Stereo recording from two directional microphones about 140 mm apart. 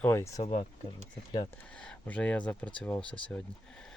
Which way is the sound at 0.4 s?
50° left (ahead or behind).